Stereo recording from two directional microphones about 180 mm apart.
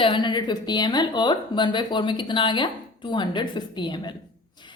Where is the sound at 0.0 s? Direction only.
25° left (ahead or behind).